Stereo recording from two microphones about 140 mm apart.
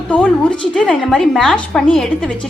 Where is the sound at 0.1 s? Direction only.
5° left (ahead or behind).